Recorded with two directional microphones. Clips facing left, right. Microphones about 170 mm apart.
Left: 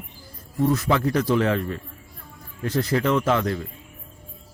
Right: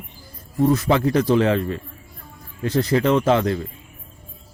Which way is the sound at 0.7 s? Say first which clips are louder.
Right 3 dB; 35° right (ahead or behind).